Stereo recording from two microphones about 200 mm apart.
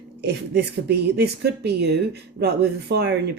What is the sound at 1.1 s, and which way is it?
Speech, 55° right (ahead or behind).